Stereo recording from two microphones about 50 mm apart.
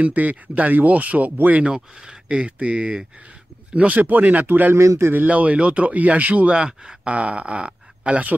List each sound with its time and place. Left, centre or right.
0.0 s speech: right
1.7 s speech: centre
3.7 s speech: right
4.7 s a man's voice: right
5.1 s speech: right